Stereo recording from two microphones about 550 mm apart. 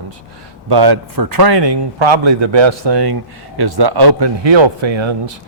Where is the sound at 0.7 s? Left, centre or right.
Right.